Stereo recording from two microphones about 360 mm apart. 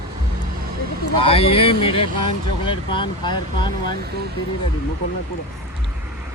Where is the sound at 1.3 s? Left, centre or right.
Centre.